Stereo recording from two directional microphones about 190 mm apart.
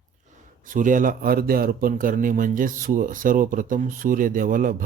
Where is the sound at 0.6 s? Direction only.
45° right (ahead or behind).